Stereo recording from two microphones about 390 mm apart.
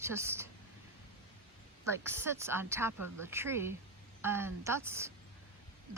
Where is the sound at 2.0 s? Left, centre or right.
Centre.